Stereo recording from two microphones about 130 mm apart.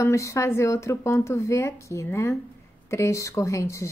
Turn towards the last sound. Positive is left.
turn(degrees=20)  # may be behind; listen again after turning